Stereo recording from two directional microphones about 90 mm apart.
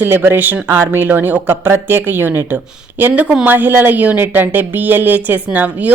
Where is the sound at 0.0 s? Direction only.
25° right (ahead or behind).